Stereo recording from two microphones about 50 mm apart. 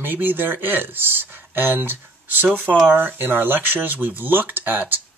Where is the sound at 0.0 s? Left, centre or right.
Right.